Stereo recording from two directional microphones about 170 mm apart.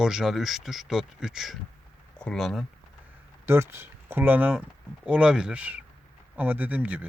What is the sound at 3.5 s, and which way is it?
Speech, 15° right (ahead or behind).